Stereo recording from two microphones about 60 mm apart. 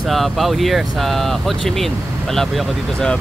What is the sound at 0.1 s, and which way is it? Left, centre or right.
Speech, centre.